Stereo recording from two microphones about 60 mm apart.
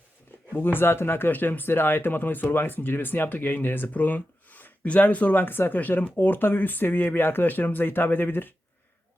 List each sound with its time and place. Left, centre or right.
0.5 s speech: left